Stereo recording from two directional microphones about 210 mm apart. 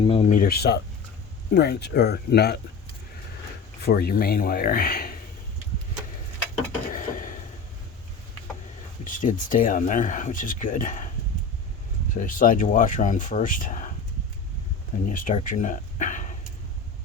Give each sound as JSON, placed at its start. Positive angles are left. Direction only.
{"t": 0.0, "sound": "speech", "side_deg": 30}
{"t": 3.8, "sound": "speech", "side_deg": 45}
{"t": 6.9, "sound": "dishes", "side_deg": 40}
{"t": 9.0, "sound": "speech", "side_deg": 40}
{"t": 12.1, "sound": "speech", "side_deg": 40}
{"t": 15.1, "sound": "speech", "side_deg": 40}